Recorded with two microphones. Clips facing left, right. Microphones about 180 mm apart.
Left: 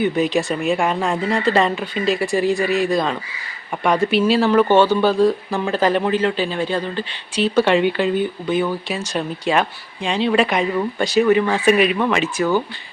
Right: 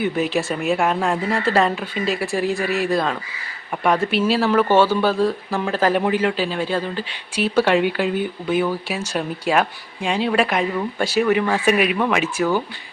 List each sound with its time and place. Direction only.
0.0 s speech: 5° right (ahead or behind)